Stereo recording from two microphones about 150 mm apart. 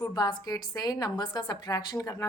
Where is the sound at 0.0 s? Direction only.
25° left (ahead or behind).